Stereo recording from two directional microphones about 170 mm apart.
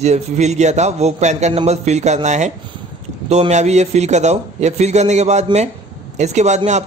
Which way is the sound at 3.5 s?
40° right (ahead or behind).